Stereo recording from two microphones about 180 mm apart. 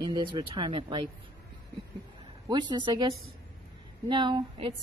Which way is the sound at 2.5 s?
25° right (ahead or behind).